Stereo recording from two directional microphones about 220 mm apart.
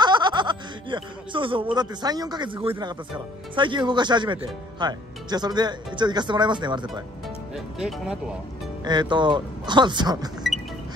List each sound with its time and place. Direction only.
0.0 s speech: 20° right (ahead or behind)
7.5 s speech: 5° right (ahead or behind)
8.8 s speech: 20° right (ahead or behind)